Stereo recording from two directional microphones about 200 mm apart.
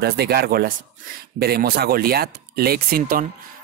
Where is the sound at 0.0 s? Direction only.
55° right (ahead or behind).